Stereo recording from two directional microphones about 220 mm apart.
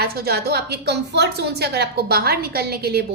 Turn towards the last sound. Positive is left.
turn(degrees=-45)  # may be behind; listen again after turning